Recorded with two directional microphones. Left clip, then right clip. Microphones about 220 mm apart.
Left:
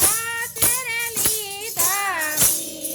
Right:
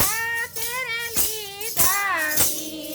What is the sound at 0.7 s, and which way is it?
Music, 5° left (ahead or behind).